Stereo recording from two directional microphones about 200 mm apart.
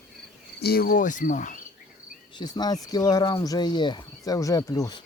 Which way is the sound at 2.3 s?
20° left (ahead or behind).